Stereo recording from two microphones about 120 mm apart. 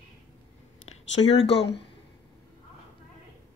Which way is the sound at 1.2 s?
40° left (ahead or behind).